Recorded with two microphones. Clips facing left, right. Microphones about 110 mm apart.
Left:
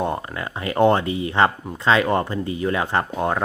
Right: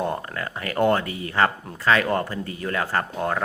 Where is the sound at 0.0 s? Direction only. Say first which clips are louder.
Left 2 dB; 15° left (ahead or behind).